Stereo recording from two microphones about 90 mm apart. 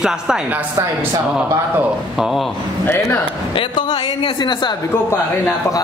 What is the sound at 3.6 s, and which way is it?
A woman's voice, 60° left (ahead or behind).